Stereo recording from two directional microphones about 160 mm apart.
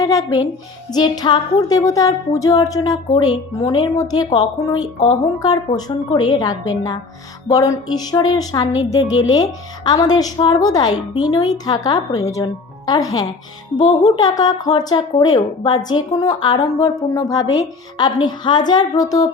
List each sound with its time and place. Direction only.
0.0 s a woman's voice: 20° left (ahead or behind)